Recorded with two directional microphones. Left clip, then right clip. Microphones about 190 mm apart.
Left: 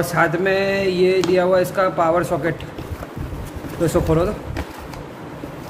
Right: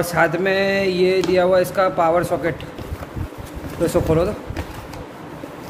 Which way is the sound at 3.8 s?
10° right (ahead or behind).